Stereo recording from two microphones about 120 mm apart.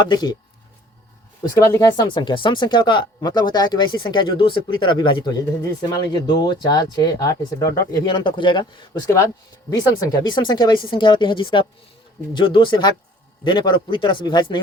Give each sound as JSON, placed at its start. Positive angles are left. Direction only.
{"t": 0.0, "sound": "speech", "side_deg": 35}
{"t": 1.5, "sound": "speech", "side_deg": 25}
{"t": 8.9, "sound": "speech", "side_deg": 25}